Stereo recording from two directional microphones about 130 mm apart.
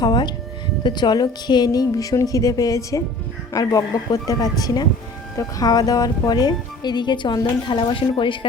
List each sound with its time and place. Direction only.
0.0 s a woman's voice: 35° left (ahead or behind)